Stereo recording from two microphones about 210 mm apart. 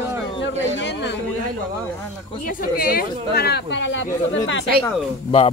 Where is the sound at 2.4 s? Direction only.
45° left (ahead or behind); by 4.4 s 60° left (ahead or behind).